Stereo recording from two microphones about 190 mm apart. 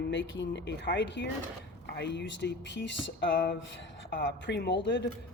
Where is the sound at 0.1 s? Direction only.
75° left (ahead or behind).